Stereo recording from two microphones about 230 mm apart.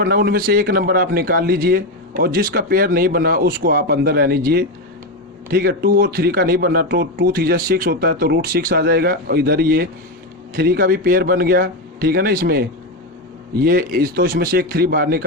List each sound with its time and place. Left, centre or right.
0.0 s speech: right
13.7 s speech: right